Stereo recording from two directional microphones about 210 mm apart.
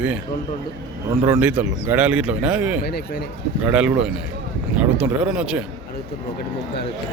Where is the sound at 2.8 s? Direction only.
50° left (ahead or behind).